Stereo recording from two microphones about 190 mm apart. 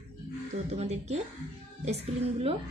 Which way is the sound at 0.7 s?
35° right (ahead or behind).